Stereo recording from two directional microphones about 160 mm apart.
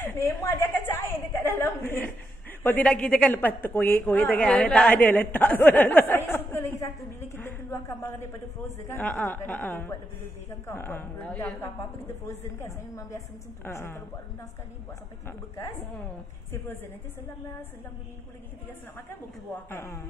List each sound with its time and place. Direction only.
0.0 s a sound: 15° left (ahead or behind)
2.6 s a woman's voice: 10° left (ahead or behind)
12.3 s a woman's voice: 20° left (ahead or behind)
19.7 s a woman's voice: 15° left (ahead or behind)